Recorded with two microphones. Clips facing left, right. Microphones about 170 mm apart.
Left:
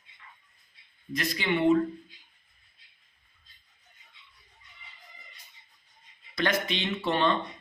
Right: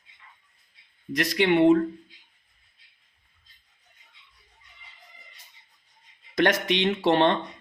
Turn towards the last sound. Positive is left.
turn(degrees=-75)  # may be behind; listen again after turning